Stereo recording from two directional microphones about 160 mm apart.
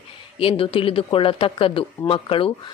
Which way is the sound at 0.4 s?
35° left (ahead or behind).